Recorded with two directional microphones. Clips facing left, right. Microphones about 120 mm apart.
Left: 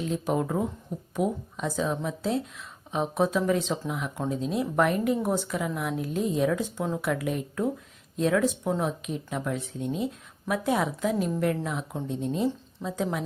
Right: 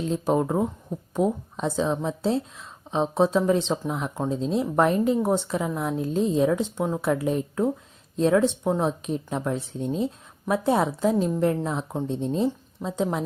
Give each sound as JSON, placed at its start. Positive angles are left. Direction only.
{"t": 0.0, "sound": "a woman's voice", "side_deg": -30}